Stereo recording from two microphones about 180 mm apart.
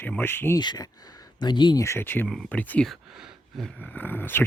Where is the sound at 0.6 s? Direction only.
20° left (ahead or behind).